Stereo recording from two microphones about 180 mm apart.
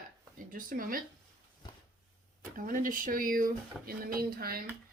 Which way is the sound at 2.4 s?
50° right (ahead or behind).